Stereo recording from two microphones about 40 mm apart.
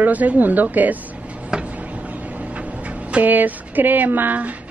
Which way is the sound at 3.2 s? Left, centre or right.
Right.